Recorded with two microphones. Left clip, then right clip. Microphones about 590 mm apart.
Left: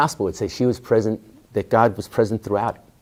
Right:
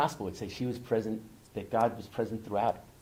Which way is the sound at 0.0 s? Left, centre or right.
Left.